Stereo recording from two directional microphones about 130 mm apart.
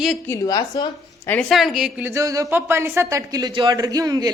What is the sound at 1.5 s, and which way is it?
Speech, centre (ahead or behind).